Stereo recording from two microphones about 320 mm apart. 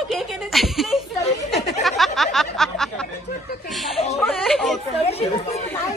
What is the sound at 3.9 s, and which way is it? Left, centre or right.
A woman's voice, centre.